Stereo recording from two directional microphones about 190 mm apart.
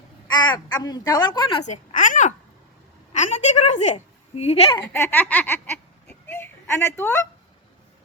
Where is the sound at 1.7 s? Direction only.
45° left (ahead or behind).